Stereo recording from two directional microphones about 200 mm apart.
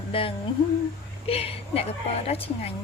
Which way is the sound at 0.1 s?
25° left (ahead or behind).